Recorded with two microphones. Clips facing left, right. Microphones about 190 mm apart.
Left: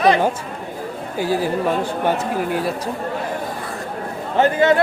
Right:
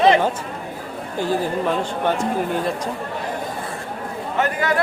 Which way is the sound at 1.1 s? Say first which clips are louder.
Left 1 dB; 10° left (ahead or behind).